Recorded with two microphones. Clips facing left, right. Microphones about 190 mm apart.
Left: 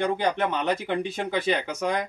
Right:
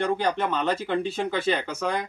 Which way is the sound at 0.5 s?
15° left (ahead or behind).